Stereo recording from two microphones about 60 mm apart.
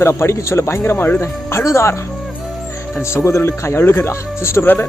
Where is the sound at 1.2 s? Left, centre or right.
Left.